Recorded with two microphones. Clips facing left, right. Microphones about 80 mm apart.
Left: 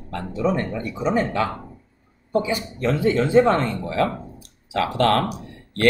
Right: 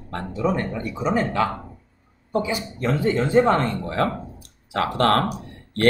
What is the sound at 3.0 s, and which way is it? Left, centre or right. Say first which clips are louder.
Speech: left 2 dB; right.